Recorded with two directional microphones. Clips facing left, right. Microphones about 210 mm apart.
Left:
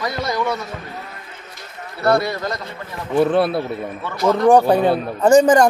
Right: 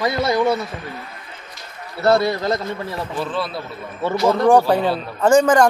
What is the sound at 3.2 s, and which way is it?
Speech, 60° left (ahead or behind).